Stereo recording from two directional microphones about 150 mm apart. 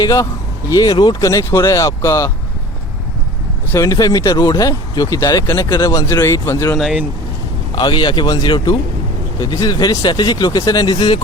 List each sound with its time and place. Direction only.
0.0 s speech: 25° left (ahead or behind)
3.7 s speech: 20° left (ahead or behind)
6.7 s speech: centre (ahead or behind)
7.8 s speech: 30° left (ahead or behind)